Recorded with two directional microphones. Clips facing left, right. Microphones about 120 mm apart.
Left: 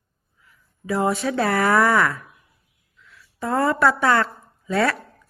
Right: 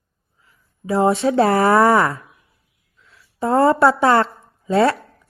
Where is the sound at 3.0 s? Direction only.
30° right (ahead or behind).